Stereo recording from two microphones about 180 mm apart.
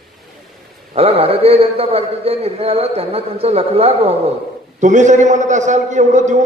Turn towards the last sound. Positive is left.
turn(degrees=-40)  # may be behind; listen again after turning